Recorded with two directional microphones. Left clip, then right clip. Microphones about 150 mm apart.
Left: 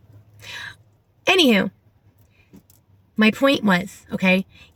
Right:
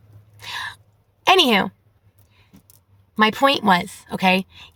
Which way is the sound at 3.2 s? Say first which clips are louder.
Right 2 dB; 40° right (ahead or behind).